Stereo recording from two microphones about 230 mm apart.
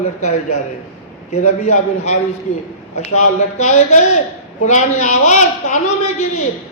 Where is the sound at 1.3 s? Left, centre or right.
Left.